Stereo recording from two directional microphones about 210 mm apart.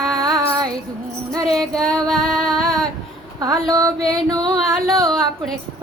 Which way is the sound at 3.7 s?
15° right (ahead or behind).